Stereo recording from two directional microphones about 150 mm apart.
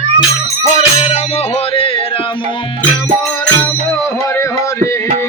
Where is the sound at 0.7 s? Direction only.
45° left (ahead or behind).